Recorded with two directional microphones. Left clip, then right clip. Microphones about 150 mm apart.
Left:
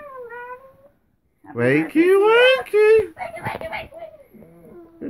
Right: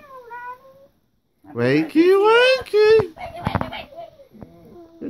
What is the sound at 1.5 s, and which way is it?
Speech, 5° right (ahead or behind).